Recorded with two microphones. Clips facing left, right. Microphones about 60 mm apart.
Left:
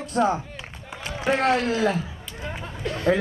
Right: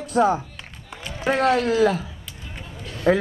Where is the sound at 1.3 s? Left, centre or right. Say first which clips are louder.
Right 3 dB; left.